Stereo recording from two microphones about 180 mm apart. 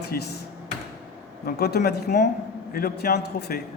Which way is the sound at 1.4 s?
60° left (ahead or behind).